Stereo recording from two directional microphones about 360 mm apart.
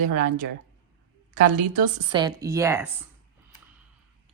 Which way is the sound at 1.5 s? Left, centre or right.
Centre.